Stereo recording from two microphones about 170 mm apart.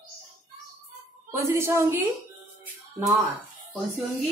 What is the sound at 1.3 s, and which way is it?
Speech, 15° right (ahead or behind).